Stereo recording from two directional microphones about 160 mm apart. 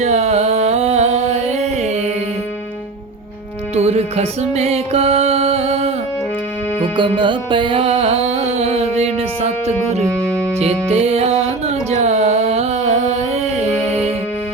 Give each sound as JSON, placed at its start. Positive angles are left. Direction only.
{"t": 0.0, "sound": "music", "side_deg": -45}
{"t": 3.8, "sound": "music", "side_deg": -40}
{"t": 6.9, "sound": "music", "side_deg": -30}